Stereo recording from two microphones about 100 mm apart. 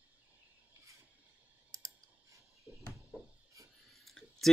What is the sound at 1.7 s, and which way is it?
Clicking, 35° right (ahead or behind).